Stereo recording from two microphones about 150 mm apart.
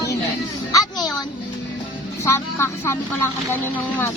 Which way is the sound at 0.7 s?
25° left (ahead or behind).